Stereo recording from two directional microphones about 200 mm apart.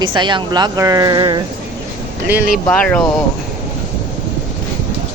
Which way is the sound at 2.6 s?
5° left (ahead or behind).